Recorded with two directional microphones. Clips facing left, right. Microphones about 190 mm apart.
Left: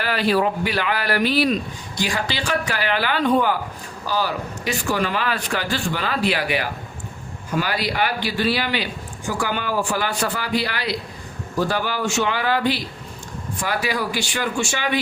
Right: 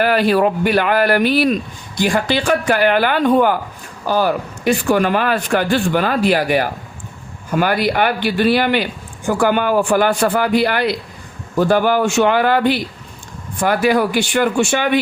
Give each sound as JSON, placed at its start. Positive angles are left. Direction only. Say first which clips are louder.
{"t": 0.0, "sound": "a man's voice", "louder": "right 6 dB", "side_deg": -50}